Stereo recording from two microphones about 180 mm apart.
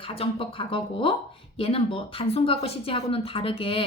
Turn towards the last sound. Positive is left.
turn(degrees=30)  # may be behind; listen again after turning